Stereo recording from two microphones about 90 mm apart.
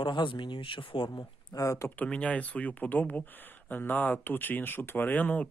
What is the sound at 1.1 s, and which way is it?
Speech, 40° left (ahead or behind).